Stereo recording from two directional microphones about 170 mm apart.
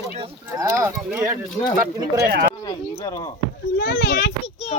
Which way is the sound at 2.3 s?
65° right (ahead or behind).